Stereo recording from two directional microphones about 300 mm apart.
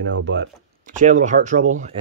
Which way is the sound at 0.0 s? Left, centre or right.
Right.